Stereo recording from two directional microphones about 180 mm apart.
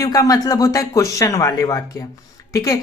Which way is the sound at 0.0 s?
20° left (ahead or behind).